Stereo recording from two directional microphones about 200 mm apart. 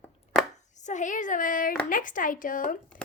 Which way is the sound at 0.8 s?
35° left (ahead or behind).